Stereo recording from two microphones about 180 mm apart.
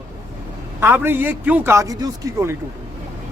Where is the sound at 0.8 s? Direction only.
10° right (ahead or behind).